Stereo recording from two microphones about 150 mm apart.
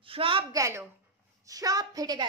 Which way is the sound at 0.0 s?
35° right (ahead or behind).